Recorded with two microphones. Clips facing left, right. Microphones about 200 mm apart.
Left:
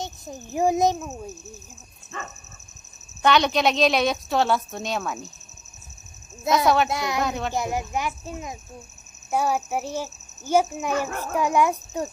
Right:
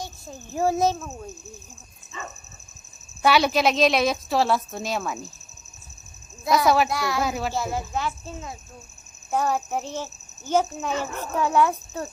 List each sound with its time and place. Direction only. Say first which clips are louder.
0.0 s a child's voice: left 3 dB; 15° left (ahead or behind)
2.1 s dog: left 1 dB; 60° left (ahead or behind)
3.2 s a woman's voice: even; 5° right (ahead or behind)
6.7 s a woman's voice: even; centre (ahead or behind)
6.9 s speech: even; 20° left (ahead or behind)
7.2 s a woman's voice: even; 5° right (ahead or behind)
7.5 s a child's voice: left 1 dB; 15° left (ahead or behind)